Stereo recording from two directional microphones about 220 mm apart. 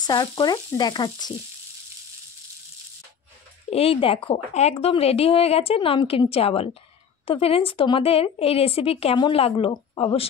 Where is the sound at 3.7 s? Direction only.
25° left (ahead or behind).